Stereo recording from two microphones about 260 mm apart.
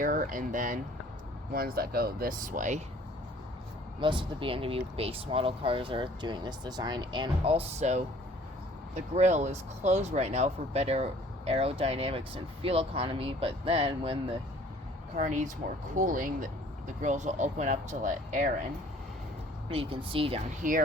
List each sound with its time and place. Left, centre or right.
0.0 s speech: right
4.0 s speech: centre
19.6 s speech: right